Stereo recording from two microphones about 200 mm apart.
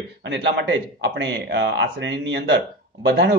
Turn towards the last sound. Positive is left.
turn(degrees=-65)  # may be behind; listen again after turning